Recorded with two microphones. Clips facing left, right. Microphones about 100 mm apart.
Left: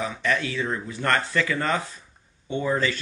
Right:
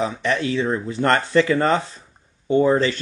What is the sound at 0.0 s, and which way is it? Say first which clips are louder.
Speech: right 4 dB; 25° right (ahead or behind).